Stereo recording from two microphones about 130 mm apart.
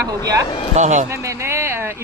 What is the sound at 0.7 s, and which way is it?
Speech, 65° right (ahead or behind).